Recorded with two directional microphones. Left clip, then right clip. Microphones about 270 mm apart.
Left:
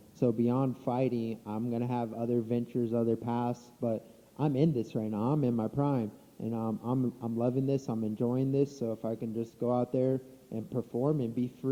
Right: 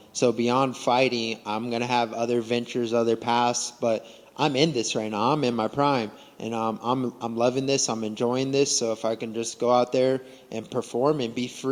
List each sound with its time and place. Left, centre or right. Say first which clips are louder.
0.2 s speech: right 8 dB; centre
10.9 s speech: right 8 dB; right
11.2 s speech: right 6 dB; centre